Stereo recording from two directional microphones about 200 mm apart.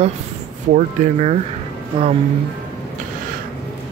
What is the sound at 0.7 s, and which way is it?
Speech, 35° right (ahead or behind).